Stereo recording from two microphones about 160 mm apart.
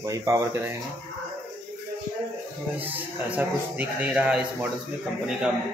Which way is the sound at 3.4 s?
10° right (ahead or behind).